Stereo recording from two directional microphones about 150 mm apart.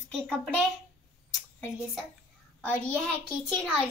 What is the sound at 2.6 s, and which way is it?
Speech, 10° left (ahead or behind).